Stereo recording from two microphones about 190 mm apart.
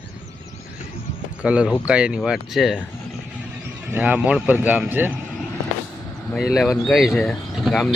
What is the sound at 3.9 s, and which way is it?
Speech, 5° right (ahead or behind).